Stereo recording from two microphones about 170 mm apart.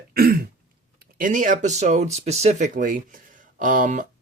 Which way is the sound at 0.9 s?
50° right (ahead or behind).